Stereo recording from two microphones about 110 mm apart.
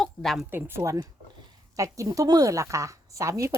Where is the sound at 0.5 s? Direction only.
20° right (ahead or behind).